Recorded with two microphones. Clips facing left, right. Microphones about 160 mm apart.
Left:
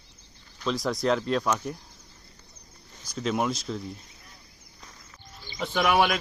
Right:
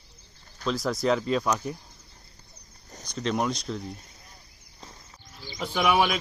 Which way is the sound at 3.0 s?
5° left (ahead or behind).